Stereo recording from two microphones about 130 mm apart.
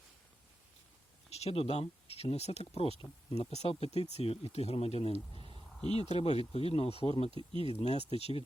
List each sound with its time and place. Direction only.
1.3 s speech: 55° left (ahead or behind)